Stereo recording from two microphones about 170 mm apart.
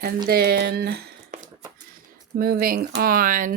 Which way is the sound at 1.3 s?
45° right (ahead or behind).